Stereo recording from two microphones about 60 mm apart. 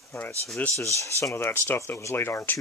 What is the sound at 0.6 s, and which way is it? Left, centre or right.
Speech, left.